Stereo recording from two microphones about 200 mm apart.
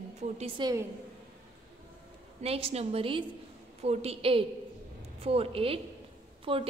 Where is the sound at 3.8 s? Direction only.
30° right (ahead or behind).